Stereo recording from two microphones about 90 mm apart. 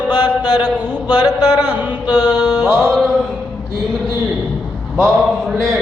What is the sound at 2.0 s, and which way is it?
Mantra, 50° left (ahead or behind).